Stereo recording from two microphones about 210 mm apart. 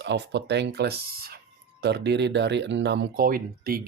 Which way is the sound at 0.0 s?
55° right (ahead or behind).